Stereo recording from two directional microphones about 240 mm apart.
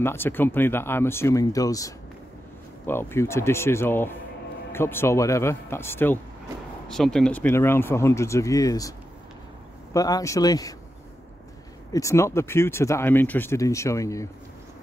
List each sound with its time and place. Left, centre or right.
0.0 s speech: centre
9.9 s speech: centre
11.9 s speech: centre